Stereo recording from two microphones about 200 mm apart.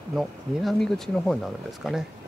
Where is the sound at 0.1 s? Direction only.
Centre (ahead or behind).